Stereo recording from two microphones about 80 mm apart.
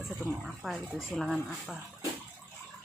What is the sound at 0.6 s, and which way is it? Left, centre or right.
Speech, centre.